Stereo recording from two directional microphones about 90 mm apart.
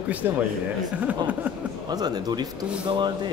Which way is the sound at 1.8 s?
50° right (ahead or behind).